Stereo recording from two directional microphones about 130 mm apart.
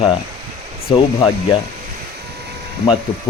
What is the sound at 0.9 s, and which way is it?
Speech, 45° left (ahead or behind).